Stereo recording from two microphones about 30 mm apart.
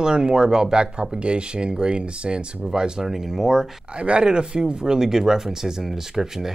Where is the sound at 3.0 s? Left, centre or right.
Centre.